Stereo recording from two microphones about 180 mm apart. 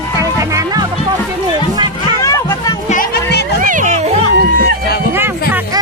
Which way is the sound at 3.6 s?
45° right (ahead or behind).